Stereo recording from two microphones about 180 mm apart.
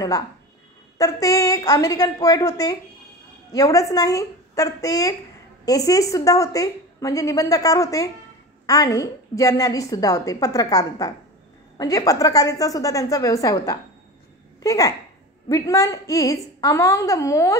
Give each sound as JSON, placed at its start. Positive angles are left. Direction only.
{"t": 0.9, "sound": "a woman's voice", "side_deg": 20}